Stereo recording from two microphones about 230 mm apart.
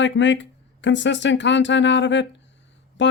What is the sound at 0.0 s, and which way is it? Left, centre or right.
Speech, left.